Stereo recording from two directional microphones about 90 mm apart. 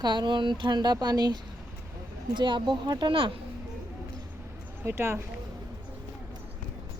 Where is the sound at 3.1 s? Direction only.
70° right (ahead or behind).